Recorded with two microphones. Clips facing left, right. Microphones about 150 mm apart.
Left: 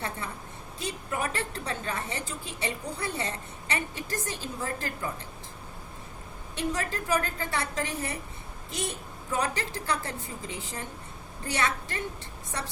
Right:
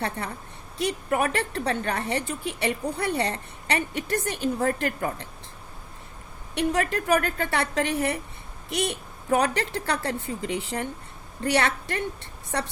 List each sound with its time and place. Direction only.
0.8 s a woman's voice: 70° right (ahead or behind)
6.5 s a woman's voice: 65° right (ahead or behind)